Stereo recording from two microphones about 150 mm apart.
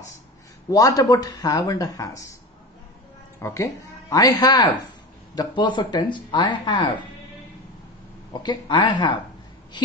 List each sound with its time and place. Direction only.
0.7 s speech: 25° left (ahead or behind)
3.3 s speech: 20° left (ahead or behind)
8.3 s speech: 30° left (ahead or behind)